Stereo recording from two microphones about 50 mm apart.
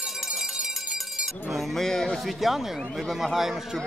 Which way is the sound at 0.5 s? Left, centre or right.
Centre.